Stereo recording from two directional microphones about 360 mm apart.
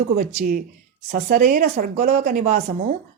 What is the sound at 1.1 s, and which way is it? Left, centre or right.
A woman's voice, right.